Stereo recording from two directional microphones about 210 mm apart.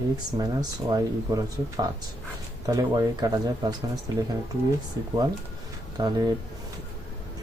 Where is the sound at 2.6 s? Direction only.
15° right (ahead or behind).